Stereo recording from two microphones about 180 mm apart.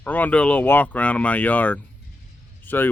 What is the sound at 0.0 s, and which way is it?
Speech, 10° left (ahead or behind).